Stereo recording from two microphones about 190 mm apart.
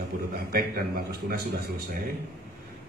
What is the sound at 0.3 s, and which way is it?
A man's voice, 55° right (ahead or behind).